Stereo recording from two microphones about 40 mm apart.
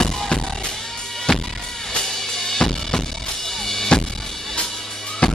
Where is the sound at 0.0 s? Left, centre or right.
Centre.